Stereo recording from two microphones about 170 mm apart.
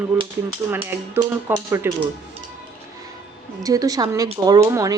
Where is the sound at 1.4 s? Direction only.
15° right (ahead or behind).